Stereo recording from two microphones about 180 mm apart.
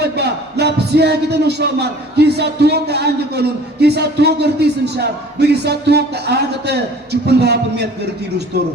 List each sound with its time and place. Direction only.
0.0 s a man's voice: 65° right (ahead or behind)